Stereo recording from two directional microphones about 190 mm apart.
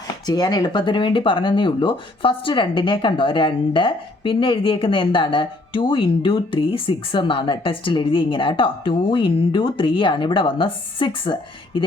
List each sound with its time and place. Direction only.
0.3 s speech: 20° left (ahead or behind)